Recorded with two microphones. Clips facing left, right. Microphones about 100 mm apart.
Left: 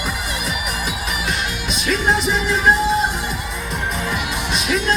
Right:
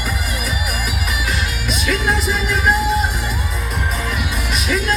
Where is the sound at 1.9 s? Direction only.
25° left (ahead or behind).